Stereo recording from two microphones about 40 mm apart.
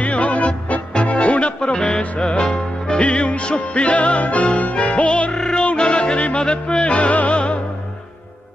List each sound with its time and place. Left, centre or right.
0.0 s music: left; by 3.0 s centre
3.0 s music: left
6.1 s yodeling: left
6.8 s music: left